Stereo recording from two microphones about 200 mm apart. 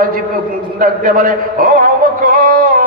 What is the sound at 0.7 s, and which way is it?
Speech, 45° right (ahead or behind).